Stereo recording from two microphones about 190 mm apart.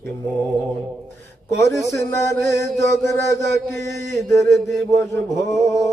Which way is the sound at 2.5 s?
15° left (ahead or behind).